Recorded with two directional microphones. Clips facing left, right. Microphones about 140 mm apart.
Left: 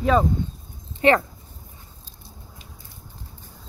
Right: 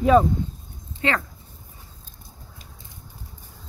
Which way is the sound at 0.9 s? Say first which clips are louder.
Left 7 dB; 20° left (ahead or behind).